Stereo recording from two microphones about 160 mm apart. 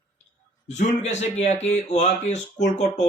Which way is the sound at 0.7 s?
45° left (ahead or behind).